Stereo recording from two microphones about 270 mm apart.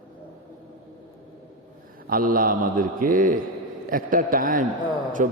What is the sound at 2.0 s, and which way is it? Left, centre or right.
A man's voice, right.